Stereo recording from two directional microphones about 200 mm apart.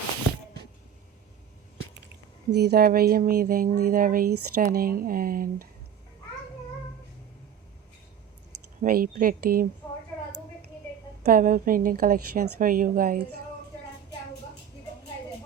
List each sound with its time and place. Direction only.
2.5 s speech: 55° right (ahead or behind)
8.8 s speech: 45° right (ahead or behind)
11.3 s speech: 45° right (ahead or behind)